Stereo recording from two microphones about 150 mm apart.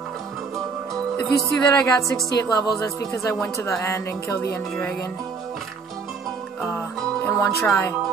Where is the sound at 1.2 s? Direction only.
20° left (ahead or behind).